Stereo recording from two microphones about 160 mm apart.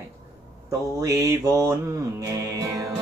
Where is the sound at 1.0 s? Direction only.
20° right (ahead or behind).